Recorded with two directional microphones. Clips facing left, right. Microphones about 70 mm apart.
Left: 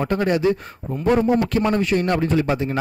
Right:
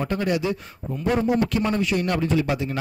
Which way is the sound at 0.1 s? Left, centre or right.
Left.